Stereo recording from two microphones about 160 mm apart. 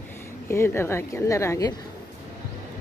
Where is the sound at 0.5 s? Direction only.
15° left (ahead or behind).